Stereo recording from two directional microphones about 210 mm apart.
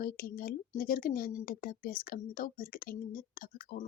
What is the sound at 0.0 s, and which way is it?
A woman's voice, 45° left (ahead or behind).